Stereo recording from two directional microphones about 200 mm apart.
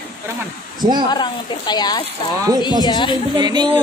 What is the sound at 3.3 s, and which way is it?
Speech, 20° right (ahead or behind).